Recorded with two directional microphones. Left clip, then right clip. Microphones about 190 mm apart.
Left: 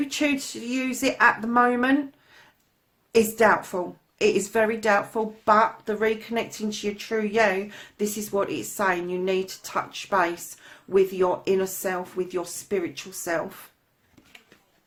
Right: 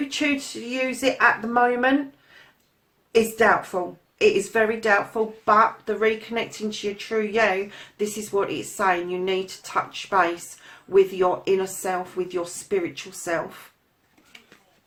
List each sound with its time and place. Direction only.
0.1 s speech: 35° left (ahead or behind)
3.1 s speech: 35° left (ahead or behind)